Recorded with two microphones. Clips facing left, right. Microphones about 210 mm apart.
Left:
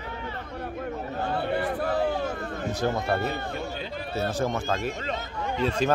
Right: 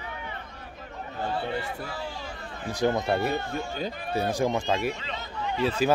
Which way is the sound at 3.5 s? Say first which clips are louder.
Right 1 dB; 50° right (ahead or behind).